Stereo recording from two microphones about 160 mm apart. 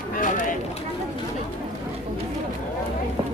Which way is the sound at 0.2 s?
55° left (ahead or behind).